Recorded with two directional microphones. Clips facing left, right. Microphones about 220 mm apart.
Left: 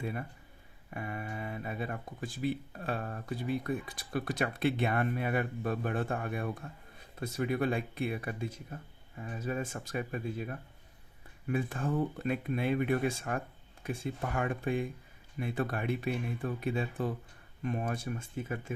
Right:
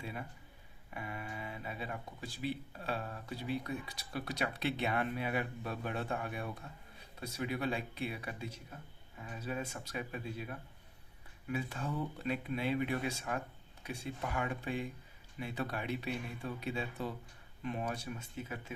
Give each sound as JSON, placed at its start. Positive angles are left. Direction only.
{"t": 0.0, "sound": "speech", "side_deg": 50}